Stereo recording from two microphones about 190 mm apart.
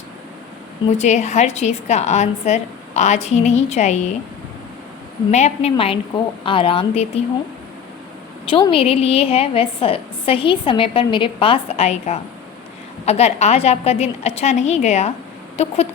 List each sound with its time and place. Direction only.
0.9 s a woman's voice: 35° left (ahead or behind)
5.3 s a woman's voice: 35° left (ahead or behind)
8.4 s a woman's voice: 25° left (ahead or behind)